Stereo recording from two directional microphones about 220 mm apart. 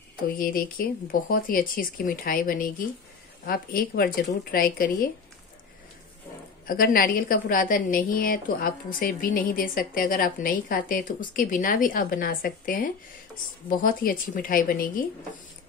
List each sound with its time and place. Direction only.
0.4 s a woman's voice: 40° left (ahead or behind)
6.7 s a woman's voice: 40° left (ahead or behind)